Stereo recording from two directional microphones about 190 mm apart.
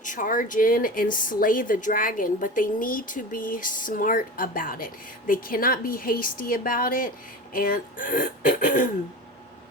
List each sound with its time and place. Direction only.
0.0 s speech: 45° left (ahead or behind)